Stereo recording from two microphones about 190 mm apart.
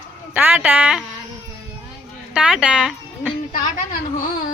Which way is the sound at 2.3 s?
5° right (ahead or behind).